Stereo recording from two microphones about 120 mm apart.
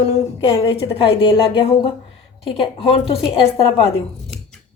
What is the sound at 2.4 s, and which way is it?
A woman's voice, 50° left (ahead or behind).